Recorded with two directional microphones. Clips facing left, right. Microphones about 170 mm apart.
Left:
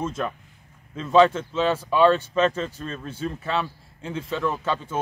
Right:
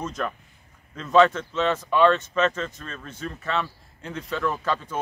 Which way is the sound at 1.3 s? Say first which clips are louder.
Left 1 dB; 30° left (ahead or behind).